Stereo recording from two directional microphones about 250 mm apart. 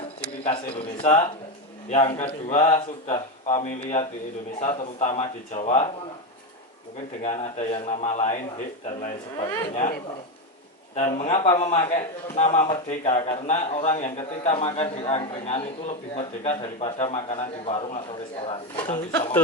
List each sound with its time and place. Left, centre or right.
0.4 s a man's voice: left
7.2 s a man's voice: left
9.0 s speech: centre
9.7 s a man's voice: left